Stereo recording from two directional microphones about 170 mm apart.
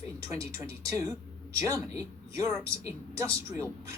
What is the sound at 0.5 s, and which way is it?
Speech, 15° right (ahead or behind).